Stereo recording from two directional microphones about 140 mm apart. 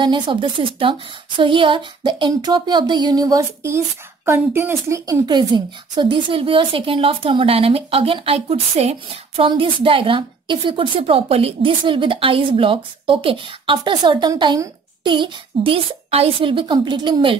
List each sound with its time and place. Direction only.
0.0 s a woman's voice: 35° right (ahead or behind)